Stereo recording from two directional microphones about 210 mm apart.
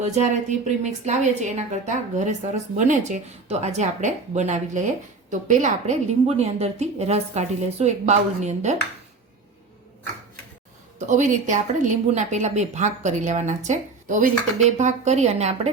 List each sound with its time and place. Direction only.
0.0 s a woman's voice: 35° right (ahead or behind)
11.0 s a woman's voice: 35° right (ahead or behind)